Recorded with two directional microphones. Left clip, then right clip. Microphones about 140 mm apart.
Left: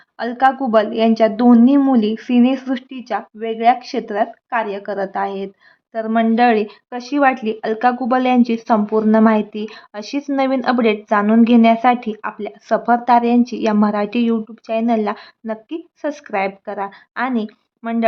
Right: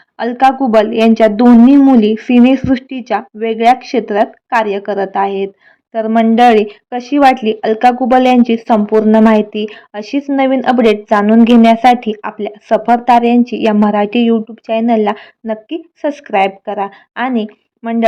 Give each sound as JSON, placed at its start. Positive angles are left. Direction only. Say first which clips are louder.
{"t": 0.2, "sound": "speech", "louder": "right 5 dB", "side_deg": -25}